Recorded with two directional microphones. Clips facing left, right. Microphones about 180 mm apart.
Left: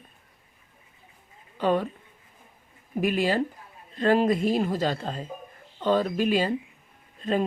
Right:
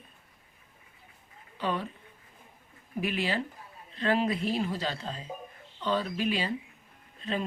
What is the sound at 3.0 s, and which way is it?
Speech, 45° left (ahead or behind).